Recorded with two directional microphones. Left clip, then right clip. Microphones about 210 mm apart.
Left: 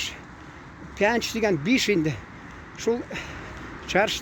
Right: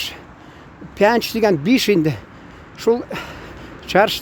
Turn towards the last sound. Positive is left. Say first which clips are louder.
# right 8 dB
turn(degrees=-25)  # may be behind; listen again after turning